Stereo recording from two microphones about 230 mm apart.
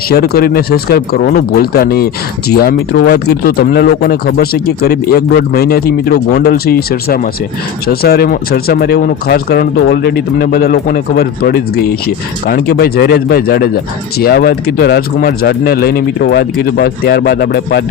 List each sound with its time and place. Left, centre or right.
0.1 s speech: left